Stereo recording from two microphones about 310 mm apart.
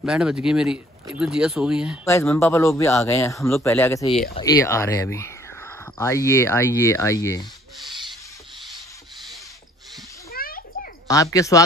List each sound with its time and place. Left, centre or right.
0.0 s speech: centre
2.0 s a man's voice: centre
10.3 s a sound: left
11.1 s a man's voice: centre